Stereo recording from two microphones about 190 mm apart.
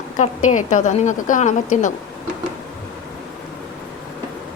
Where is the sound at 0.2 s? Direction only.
40° left (ahead or behind).